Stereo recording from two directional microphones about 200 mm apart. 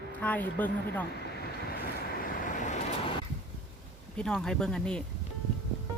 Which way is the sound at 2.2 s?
40° left (ahead or behind).